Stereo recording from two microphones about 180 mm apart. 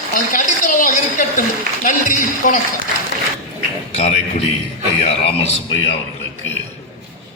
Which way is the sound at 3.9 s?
35° left (ahead or behind).